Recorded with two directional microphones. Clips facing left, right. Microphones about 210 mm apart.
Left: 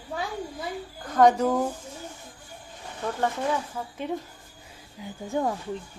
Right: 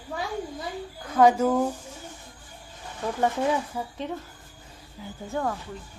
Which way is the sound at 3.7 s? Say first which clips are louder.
Right 2 dB; 10° right (ahead or behind).